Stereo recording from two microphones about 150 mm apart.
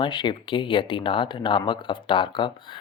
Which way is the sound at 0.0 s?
30° left (ahead or behind).